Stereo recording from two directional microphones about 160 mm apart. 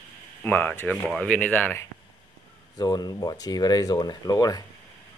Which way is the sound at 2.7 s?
25° left (ahead or behind).